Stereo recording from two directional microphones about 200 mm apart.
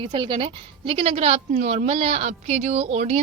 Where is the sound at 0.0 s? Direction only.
25° right (ahead or behind).